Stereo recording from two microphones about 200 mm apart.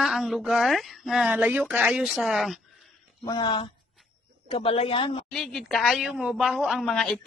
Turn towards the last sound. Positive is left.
turn(degrees=5)  # may be behind; listen again after turning